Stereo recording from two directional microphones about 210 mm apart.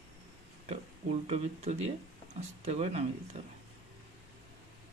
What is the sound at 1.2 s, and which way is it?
Speech, 30° right (ahead or behind).